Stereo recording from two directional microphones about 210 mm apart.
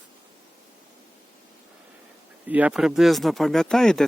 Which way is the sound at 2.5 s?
5° right (ahead or behind).